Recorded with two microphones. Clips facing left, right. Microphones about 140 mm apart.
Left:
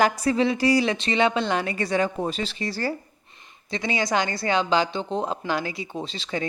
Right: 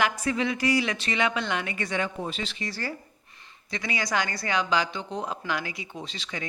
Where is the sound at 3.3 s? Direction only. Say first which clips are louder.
Left 5 dB; 20° left (ahead or behind).